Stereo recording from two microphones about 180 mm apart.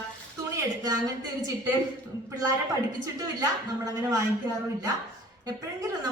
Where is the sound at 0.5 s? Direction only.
20° right (ahead or behind).